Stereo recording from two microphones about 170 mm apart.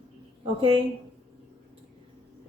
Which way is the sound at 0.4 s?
35° right (ahead or behind).